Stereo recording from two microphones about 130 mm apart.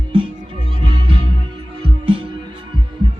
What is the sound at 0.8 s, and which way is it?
Music, 45° right (ahead or behind).